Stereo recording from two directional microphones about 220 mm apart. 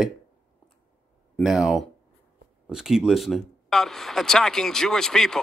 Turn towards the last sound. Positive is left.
turn(degrees=0)  # may be behind; listen again after turning